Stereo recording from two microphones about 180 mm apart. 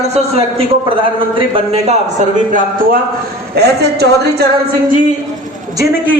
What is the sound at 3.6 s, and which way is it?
Speech, 65° right (ahead or behind).